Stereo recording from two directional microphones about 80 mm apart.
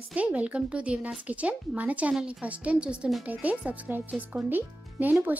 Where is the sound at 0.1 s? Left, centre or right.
Centre.